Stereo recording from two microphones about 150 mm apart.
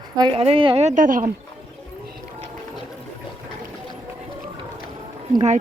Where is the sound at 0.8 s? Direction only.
60° right (ahead or behind).